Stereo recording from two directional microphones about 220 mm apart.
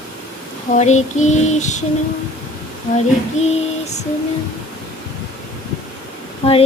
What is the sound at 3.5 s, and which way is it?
Female singing, 30° left (ahead or behind).